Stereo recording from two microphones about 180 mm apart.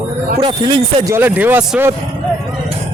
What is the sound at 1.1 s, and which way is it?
Speech, 10° right (ahead or behind).